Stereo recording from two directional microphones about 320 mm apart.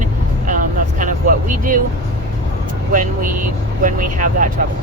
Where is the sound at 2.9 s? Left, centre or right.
Right.